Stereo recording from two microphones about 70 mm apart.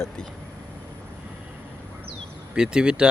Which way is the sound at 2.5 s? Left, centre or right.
Centre.